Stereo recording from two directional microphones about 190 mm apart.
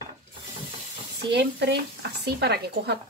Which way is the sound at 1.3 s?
60° right (ahead or behind).